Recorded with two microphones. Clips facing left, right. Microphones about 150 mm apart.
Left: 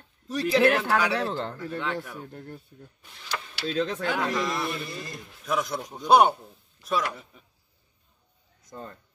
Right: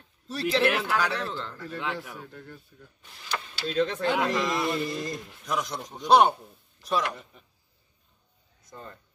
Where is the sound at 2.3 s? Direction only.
35° left (ahead or behind).